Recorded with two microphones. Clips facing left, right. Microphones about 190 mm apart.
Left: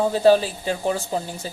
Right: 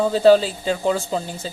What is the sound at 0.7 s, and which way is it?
Speech, 90° right.